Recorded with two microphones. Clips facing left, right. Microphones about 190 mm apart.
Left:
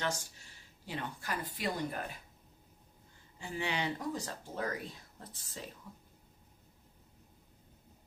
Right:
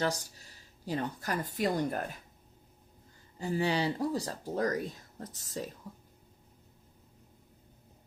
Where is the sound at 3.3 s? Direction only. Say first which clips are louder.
Right 7 dB; 40° right (ahead or behind).